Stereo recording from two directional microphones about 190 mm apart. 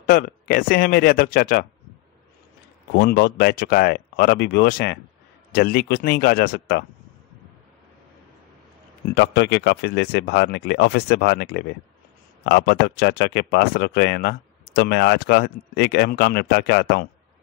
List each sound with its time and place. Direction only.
0.0 s speech: 50° left (ahead or behind)
2.9 s speech: 60° left (ahead or behind)
9.1 s speech: 65° left (ahead or behind)